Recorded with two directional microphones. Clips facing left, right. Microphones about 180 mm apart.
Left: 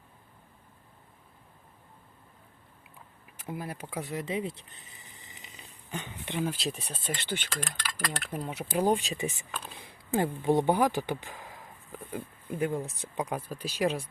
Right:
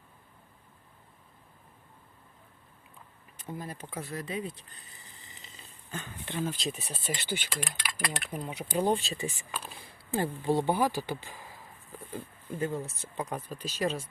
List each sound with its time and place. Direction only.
3.3 s a sound: 10° left (ahead or behind)
6.6 s speech: centre (ahead or behind)
8.4 s speech: 5° left (ahead or behind)
9.5 s speech: 5° right (ahead or behind)
9.7 s speech: 20° left (ahead or behind)